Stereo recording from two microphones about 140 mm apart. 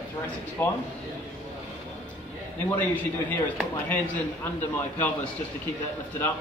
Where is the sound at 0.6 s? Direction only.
15° left (ahead or behind).